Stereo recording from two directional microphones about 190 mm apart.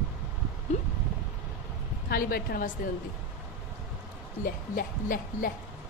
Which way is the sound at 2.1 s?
50° left (ahead or behind).